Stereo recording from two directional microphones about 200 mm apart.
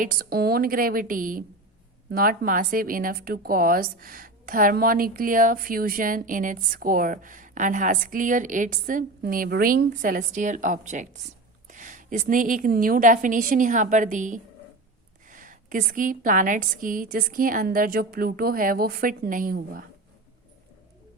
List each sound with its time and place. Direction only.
0.0 s a woman's voice: 45° right (ahead or behind)